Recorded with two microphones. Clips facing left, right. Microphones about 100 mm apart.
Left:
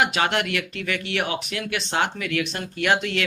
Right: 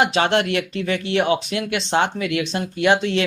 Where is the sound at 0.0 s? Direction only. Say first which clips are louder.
Right 4 dB; 30° right (ahead or behind).